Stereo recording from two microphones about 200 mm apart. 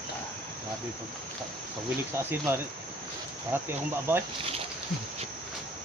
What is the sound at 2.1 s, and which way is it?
Speech, 10° right (ahead or behind).